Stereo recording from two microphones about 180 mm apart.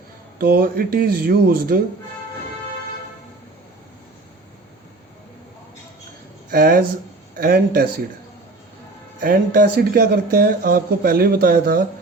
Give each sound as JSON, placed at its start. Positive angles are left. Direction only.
{"t": 0.3, "sound": "speech", "side_deg": -55}
{"t": 6.5, "sound": "speech", "side_deg": -55}
{"t": 9.2, "sound": "speech", "side_deg": -50}